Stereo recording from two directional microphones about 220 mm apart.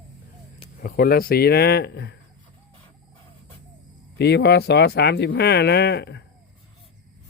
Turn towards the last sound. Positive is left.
turn(degrees=50)  # may be behind; listen again after turning